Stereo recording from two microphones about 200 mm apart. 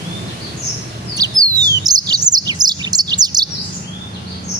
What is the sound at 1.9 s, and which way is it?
Chirp, 20° right (ahead or behind).